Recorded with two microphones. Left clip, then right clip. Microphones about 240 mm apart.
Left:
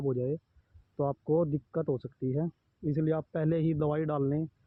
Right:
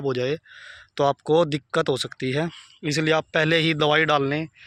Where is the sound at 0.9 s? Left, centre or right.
Right.